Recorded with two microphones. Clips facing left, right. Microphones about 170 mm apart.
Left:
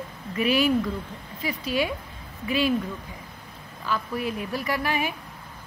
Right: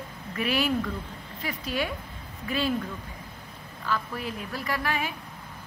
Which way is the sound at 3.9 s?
15° left (ahead or behind).